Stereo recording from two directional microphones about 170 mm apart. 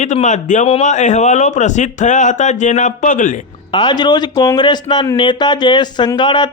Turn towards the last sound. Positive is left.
turn(degrees=25)  # may be behind; listen again after turning